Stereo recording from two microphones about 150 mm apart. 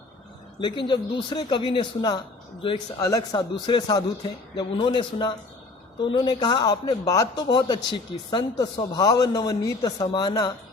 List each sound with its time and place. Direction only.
0.6 s a man's voice: 30° left (ahead or behind)